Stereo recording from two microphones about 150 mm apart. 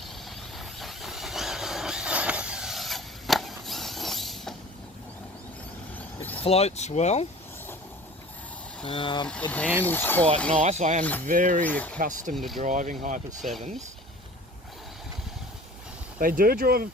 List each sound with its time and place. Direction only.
0.6 s vehicle: centre (ahead or behind)
6.4 s speech: 45° left (ahead or behind)
8.8 s speech: 35° left (ahead or behind)
9.5 s speech: 10° left (ahead or behind)
10.5 s speech: 50° right (ahead or behind)
11.3 s speech: 60° right (ahead or behind)
11.6 s speech: 10° left (ahead or behind)
11.9 s speech: 60° right (ahead or behind)
12.3 s speech: centre (ahead or behind)
12.6 s speech: 55° right (ahead or behind)
16.1 s speech: 70° right (ahead or behind)